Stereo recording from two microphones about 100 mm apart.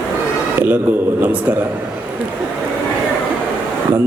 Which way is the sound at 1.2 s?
15° right (ahead or behind).